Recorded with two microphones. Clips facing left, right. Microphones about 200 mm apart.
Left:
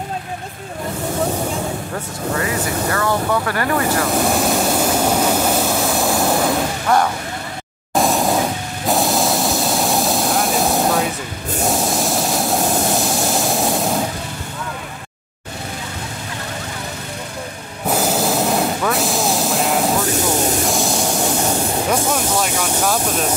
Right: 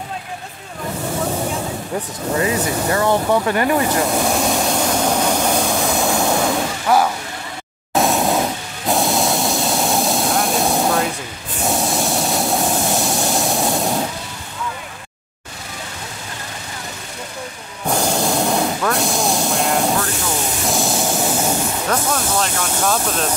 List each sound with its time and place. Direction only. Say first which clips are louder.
2.3 s speech: right 3 dB; 20° right (ahead or behind)
4.2 s vehicle: left 1 dB; centre (ahead or behind)
17.8 s a sound: left 1 dB; 5° left (ahead or behind)
20.6 s spray: left 1 dB; centre (ahead or behind)
21.8 s spray: left 1 dB; 10° left (ahead or behind)